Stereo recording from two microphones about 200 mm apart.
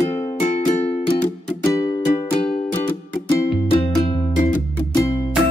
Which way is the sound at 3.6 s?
25° left (ahead or behind).